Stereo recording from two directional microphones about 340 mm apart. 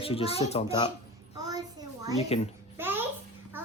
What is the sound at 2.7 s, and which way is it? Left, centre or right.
Babbling, centre.